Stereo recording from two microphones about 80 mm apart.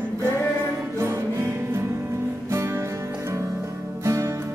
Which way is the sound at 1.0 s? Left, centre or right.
Right.